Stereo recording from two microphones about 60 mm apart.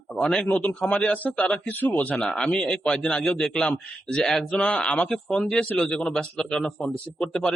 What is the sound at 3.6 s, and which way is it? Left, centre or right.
Speech, centre.